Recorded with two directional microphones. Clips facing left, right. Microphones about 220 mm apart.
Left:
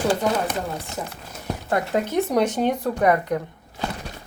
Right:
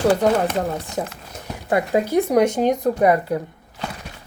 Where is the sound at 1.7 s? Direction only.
10° right (ahead or behind).